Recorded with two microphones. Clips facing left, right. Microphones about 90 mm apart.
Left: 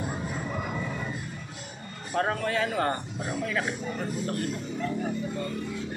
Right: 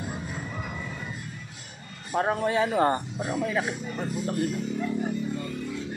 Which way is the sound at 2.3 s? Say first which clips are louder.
Right 4 dB; 20° right (ahead or behind).